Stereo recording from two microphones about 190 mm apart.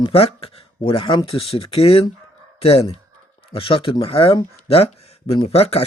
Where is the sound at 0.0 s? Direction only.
30° left (ahead or behind).